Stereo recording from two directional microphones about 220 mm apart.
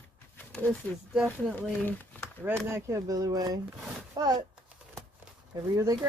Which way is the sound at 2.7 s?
15° right (ahead or behind).